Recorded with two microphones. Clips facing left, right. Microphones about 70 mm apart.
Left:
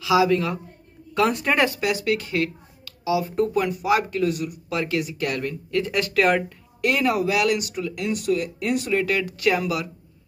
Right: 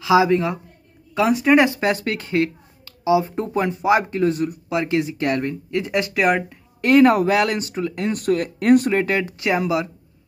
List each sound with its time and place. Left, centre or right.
0.0 s speech: right
1.1 s speech: centre
1.6 s speech: right
4.6 s speech: right
6.8 s speech: right